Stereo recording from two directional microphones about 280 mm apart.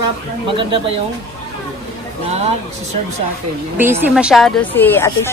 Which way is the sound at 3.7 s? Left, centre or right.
Centre.